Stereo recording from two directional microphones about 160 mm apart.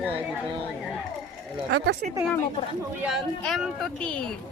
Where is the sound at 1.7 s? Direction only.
90° right.